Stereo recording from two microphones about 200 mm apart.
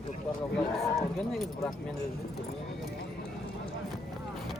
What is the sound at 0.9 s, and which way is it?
Speech, centre (ahead or behind).